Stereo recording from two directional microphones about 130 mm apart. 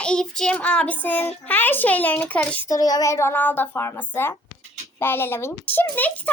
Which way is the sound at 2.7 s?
30° left (ahead or behind).